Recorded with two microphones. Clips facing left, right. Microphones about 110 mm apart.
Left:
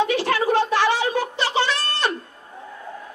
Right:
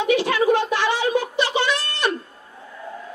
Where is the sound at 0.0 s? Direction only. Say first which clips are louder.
Right 2 dB; 15° right (ahead or behind).